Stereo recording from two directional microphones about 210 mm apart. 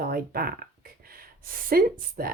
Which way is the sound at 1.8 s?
45° right (ahead or behind).